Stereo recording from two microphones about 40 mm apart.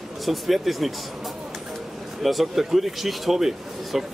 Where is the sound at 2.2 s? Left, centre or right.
Centre.